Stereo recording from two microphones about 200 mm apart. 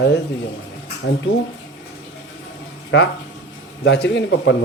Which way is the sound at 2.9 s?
60° left (ahead or behind).